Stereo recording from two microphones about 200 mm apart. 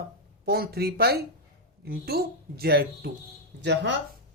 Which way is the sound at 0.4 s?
50° right (ahead or behind).